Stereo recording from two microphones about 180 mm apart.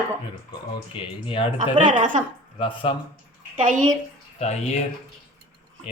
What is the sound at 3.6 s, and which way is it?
Speech, 45° right (ahead or behind).